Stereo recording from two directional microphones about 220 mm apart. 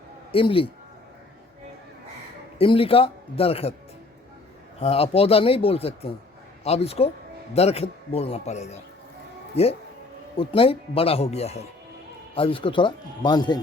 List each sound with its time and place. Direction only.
0.3 s a man's voice: 25° left (ahead or behind)
2.6 s speech: 25° left (ahead or behind)
4.8 s speech: 25° left (ahead or behind)